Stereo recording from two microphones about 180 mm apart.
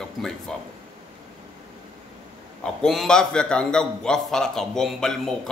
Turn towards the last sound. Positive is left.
turn(degrees=5)  # may be behind; listen again after turning